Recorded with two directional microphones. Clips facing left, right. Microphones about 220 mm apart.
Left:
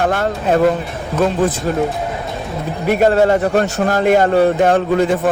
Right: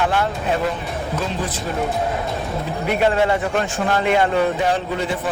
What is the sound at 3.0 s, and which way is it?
Speech, 40° left (ahead or behind).